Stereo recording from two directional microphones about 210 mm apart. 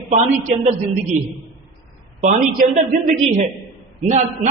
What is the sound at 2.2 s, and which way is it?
A woman's voice, 30° right (ahead or behind).